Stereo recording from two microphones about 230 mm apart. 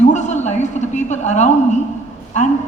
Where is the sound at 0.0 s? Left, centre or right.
Left.